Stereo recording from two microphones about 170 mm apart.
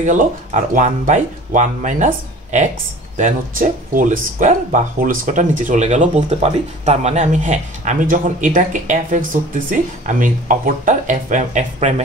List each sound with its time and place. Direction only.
0.0 s speech: 45° right (ahead or behind)